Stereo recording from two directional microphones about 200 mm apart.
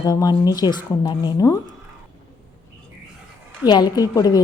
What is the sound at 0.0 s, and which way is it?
A woman's voice, 20° left (ahead or behind).